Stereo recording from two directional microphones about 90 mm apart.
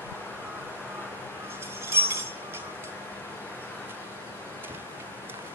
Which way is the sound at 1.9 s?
25° right (ahead or behind).